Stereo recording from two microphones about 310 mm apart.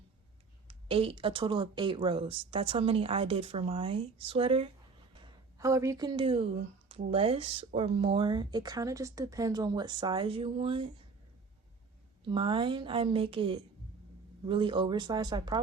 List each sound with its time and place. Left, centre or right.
0.7 s speech: centre
12.2 s speech: centre